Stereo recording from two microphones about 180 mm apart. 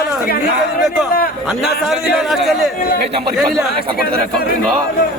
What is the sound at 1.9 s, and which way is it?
A man's voice, centre (ahead or behind).